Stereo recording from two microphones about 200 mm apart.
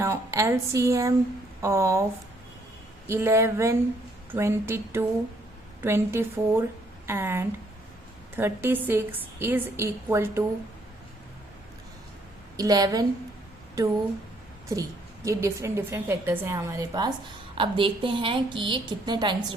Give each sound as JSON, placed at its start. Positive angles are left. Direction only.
{"t": 0.0, "sound": "a woman's voice", "side_deg": -15}
{"t": 3.1, "sound": "a woman's voice", "side_deg": -15}
{"t": 12.5, "sound": "a woman's voice", "side_deg": -20}
{"t": 14.7, "sound": "a woman's voice", "side_deg": -15}